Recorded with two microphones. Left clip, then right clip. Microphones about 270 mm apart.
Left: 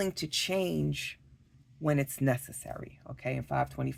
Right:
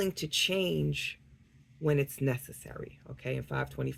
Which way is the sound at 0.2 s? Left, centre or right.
Left.